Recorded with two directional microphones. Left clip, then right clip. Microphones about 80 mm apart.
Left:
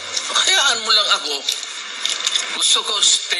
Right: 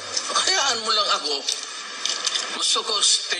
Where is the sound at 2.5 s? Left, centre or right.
Centre.